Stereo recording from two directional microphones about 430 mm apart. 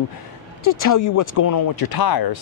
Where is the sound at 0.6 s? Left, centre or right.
Left.